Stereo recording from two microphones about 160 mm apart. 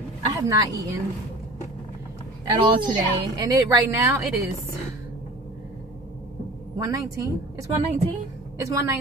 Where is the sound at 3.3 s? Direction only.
20° right (ahead or behind).